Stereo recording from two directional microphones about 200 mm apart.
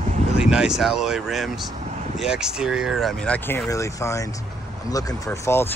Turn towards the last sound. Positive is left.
turn(degrees=15)  # may be behind; listen again after turning